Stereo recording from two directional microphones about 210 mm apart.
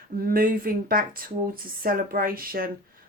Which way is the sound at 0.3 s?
45° right (ahead or behind).